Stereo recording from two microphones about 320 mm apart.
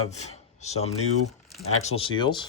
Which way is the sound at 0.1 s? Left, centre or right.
Left.